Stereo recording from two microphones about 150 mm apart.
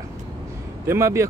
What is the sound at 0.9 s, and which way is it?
Speech, 20° right (ahead or behind).